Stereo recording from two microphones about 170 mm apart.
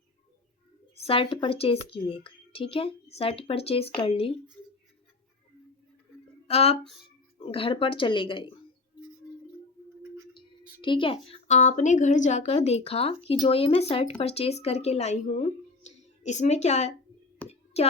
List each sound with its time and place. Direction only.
1.0 s speech: 30° left (ahead or behind)
6.5 s speech: 35° left (ahead or behind)
10.8 s speech: 30° left (ahead or behind)
17.4 s a sound: 10° left (ahead or behind)